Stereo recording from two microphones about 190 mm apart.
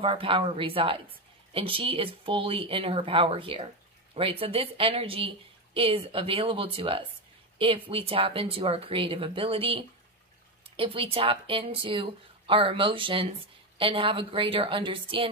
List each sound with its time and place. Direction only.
0.0 s a woman's voice: 30° right (ahead or behind)